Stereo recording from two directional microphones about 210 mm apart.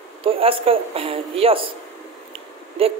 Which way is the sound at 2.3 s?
25° right (ahead or behind).